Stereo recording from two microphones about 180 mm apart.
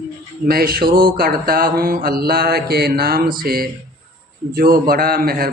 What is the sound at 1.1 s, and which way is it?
Speech, 55° right (ahead or behind).